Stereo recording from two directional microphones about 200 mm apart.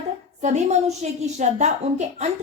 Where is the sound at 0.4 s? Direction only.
35° right (ahead or behind).